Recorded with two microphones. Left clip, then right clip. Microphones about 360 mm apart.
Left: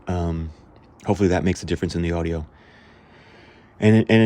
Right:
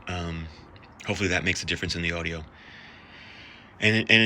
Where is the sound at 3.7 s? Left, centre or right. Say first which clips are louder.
Left 2 dB; centre.